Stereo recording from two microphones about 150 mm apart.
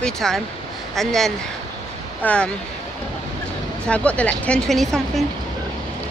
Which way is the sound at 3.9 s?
10° left (ahead or behind).